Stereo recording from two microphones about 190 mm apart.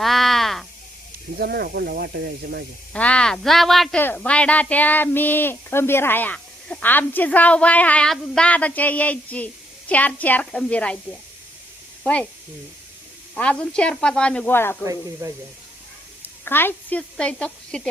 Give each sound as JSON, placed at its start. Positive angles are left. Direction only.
{"t": 0.0, "sound": "a sound", "side_deg": 0}
{"t": 1.4, "sound": "speech", "side_deg": -55}
{"t": 2.9, "sound": "speech", "side_deg": 5}
{"t": 13.3, "sound": "speech", "side_deg": 5}
{"t": 15.2, "sound": "speech", "side_deg": -15}
{"t": 16.2, "sound": "speech", "side_deg": 10}